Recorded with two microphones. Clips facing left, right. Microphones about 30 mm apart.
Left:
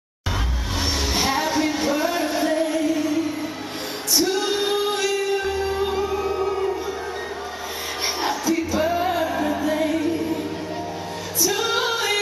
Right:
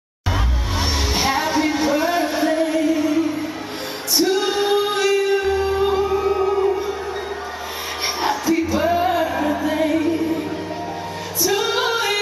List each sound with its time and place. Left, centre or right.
1.1 s singing: centre
4.3 s female singing: centre
4.6 s music: centre
8.2 s music: centre
11.4 s music: centre